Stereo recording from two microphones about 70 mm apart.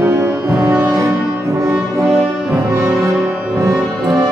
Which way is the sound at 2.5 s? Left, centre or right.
Right.